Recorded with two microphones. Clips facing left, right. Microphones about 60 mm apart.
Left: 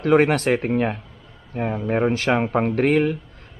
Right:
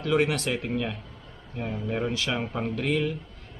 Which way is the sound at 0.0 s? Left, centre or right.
Left.